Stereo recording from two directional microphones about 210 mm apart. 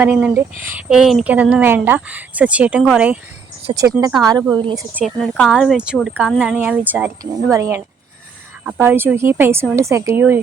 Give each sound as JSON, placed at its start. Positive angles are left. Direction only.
{"t": 0.0, "sound": "speech", "side_deg": -10}
{"t": 3.7, "sound": "speech", "side_deg": -20}
{"t": 4.9, "sound": "speech", "side_deg": 0}